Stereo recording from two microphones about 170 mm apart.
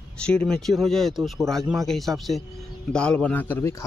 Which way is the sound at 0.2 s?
5° left (ahead or behind).